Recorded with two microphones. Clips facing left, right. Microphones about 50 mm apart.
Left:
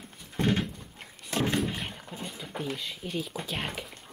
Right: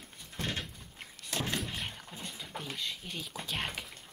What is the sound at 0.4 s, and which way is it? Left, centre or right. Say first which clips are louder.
Horse: left 10 dB; centre.